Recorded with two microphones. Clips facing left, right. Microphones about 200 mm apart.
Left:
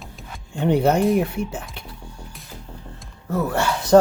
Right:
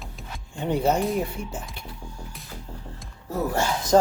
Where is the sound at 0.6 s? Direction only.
65° left (ahead or behind).